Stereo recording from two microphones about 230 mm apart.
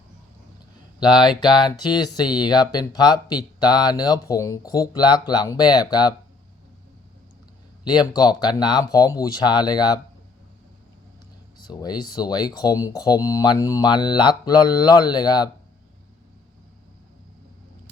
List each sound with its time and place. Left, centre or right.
1.0 s speech: centre
7.9 s speech: centre
11.6 s speech: centre